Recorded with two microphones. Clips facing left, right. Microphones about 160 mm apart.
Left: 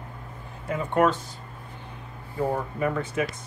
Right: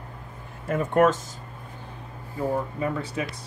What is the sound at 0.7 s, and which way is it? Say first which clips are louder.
Speech: right 2 dB; 45° right (ahead or behind).